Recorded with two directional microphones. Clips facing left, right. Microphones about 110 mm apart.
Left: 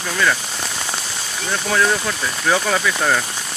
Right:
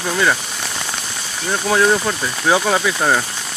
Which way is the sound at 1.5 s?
20° right (ahead or behind).